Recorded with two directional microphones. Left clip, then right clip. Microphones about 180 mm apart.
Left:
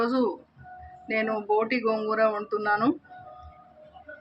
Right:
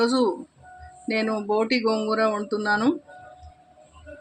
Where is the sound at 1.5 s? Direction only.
70° right (ahead or behind).